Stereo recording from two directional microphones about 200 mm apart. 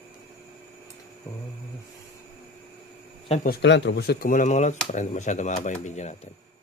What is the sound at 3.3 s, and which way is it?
Speech, 45° left (ahead or behind).